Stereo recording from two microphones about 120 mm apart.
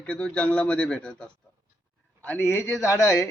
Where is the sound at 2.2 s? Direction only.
15° left (ahead or behind).